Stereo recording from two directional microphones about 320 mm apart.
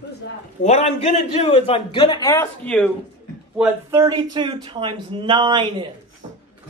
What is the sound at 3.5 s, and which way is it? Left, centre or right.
Speech, centre.